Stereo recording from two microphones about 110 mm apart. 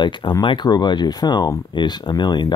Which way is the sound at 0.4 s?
45° left (ahead or behind).